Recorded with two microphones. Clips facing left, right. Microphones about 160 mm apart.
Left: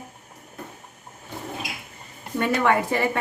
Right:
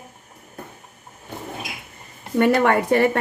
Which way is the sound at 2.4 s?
55° right (ahead or behind).